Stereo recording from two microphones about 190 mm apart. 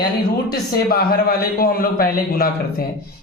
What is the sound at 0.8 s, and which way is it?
A man's voice, 55° left (ahead or behind).